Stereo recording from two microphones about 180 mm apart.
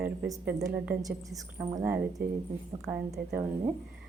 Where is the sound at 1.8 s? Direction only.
10° right (ahead or behind).